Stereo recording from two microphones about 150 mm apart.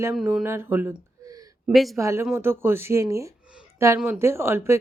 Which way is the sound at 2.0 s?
20° right (ahead or behind).